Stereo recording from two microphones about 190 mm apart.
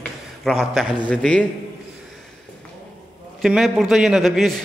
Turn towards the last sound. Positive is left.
turn(degrees=0)  # may be behind; listen again after turning